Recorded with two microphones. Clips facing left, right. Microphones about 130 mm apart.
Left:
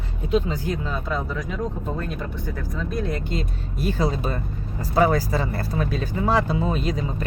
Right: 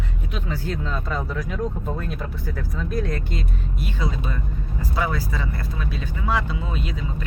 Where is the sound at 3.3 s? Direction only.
35° left (ahead or behind).